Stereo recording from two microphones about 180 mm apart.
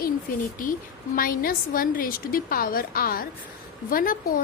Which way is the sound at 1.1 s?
50° left (ahead or behind).